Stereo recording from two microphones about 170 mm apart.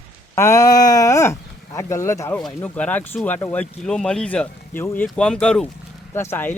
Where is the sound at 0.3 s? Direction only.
15° left (ahead or behind).